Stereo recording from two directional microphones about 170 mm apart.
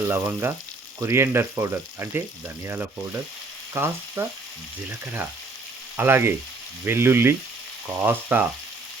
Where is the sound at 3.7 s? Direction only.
15° right (ahead or behind).